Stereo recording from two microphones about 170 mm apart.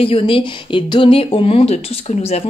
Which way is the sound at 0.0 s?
30° left (ahead or behind).